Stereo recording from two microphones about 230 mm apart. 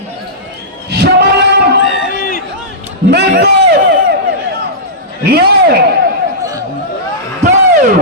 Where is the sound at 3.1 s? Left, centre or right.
Right.